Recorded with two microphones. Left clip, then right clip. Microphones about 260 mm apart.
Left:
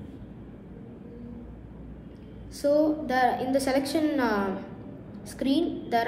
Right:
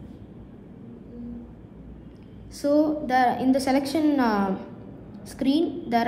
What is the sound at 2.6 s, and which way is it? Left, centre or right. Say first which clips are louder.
A woman's voice: right 1 dB; right.